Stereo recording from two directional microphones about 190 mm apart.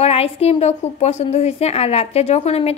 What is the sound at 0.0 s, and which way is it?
A woman's voice, 30° left (ahead or behind).